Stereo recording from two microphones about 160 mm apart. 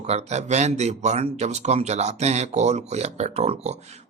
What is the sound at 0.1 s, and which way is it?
Speech, 45° right (ahead or behind).